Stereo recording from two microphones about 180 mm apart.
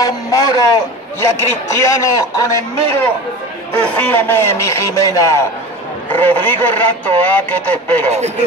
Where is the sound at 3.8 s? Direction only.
10° left (ahead or behind).